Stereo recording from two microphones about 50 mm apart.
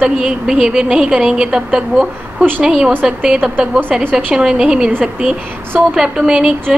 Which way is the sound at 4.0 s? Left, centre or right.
Right.